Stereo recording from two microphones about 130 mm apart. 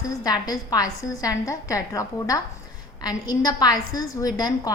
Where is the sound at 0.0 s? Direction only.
25° left (ahead or behind).